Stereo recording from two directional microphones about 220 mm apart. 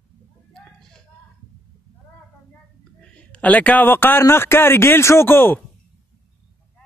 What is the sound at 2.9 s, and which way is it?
A man's voice, 5° left (ahead or behind).